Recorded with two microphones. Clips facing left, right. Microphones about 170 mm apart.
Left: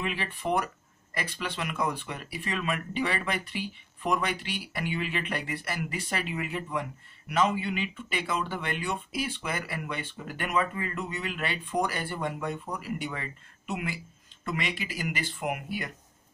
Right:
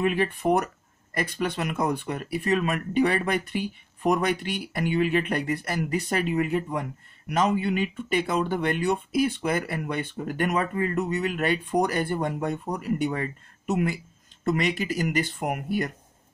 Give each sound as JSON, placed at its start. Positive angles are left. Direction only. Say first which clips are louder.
{"t": 0.0, "sound": "speech", "louder": "right 9 dB", "side_deg": -45}